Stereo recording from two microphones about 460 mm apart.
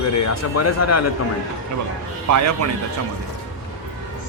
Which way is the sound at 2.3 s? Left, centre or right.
Right.